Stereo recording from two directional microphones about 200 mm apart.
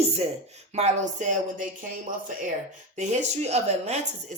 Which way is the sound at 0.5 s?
35° right (ahead or behind).